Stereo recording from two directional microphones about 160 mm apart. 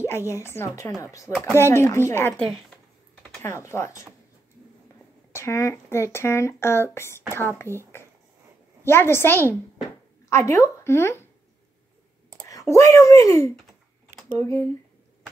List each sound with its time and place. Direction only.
0.3 s speech: 15° left (ahead or behind)
5.3 s speech: 20° left (ahead or behind)
12.4 s clicking: 20° left (ahead or behind)
12.9 s speech: 20° left (ahead or behind)